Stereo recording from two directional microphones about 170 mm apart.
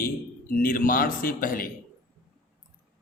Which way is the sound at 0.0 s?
55° left (ahead or behind).